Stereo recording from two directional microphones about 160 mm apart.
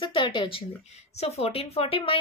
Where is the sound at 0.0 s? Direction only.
30° left (ahead or behind).